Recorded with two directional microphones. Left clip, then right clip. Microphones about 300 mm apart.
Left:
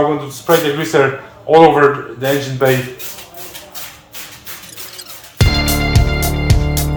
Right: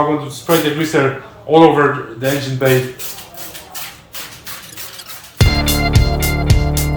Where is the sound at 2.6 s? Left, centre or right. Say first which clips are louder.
Even; centre.